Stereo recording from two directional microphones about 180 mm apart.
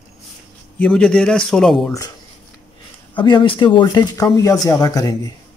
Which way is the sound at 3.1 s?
25° left (ahead or behind).